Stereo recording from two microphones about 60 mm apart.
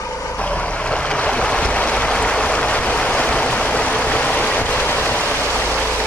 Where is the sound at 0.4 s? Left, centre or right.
Left.